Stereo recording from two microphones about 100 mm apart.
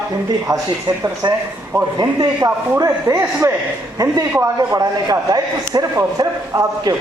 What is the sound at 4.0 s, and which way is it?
A man's voice, 40° right (ahead or behind).